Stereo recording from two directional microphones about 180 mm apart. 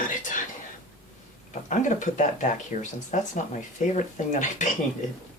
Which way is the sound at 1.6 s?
45° left (ahead or behind).